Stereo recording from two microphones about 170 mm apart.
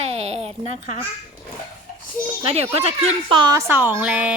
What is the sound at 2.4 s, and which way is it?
A woman's voice, 35° right (ahead or behind).